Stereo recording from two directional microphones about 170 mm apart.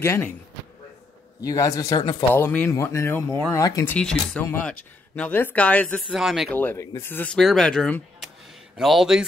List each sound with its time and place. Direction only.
0.0 s speech: 15° left (ahead or behind)
1.4 s speech: 20° left (ahead or behind)
2.3 s speech: 10° left (ahead or behind)
6.0 s speech: 5° right (ahead or behind)
6.5 s speech: 10° left (ahead or behind)